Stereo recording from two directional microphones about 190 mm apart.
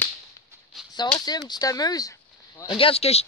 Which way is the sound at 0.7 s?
Centre (ahead or behind).